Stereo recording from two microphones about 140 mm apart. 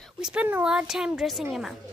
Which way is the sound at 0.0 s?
5° right (ahead or behind).